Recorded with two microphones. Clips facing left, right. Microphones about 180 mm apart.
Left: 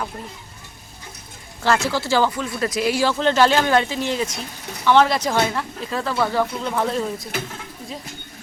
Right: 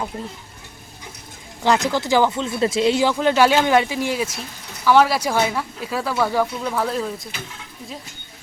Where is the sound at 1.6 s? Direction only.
15° right (ahead or behind); by 7.3 s centre (ahead or behind).